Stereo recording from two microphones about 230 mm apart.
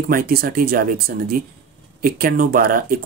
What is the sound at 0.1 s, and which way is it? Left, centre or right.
Speech, right.